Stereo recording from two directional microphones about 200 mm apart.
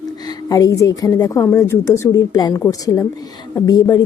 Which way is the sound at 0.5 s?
15° left (ahead or behind).